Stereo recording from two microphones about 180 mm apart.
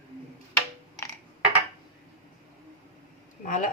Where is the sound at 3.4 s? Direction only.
45° left (ahead or behind).